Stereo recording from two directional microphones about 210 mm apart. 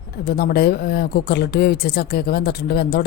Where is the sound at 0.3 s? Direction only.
50° left (ahead or behind).